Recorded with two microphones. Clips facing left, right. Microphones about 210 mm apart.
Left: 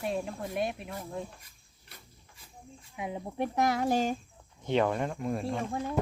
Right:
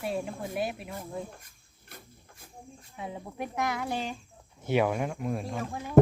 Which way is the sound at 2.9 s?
15° left (ahead or behind).